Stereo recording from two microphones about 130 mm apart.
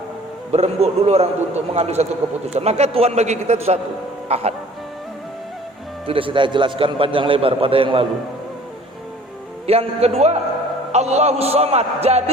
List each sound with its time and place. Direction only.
0.5 s a man's voice: 55° right (ahead or behind)
6.1 s a man's voice: 45° right (ahead or behind)
9.6 s a man's voice: 50° right (ahead or behind)